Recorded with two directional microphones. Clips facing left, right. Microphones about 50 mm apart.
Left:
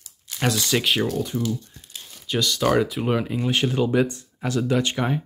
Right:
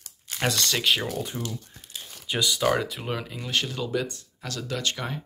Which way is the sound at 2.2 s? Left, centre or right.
Centre.